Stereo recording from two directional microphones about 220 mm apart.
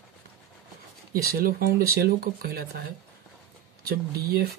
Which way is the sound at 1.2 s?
45° right (ahead or behind).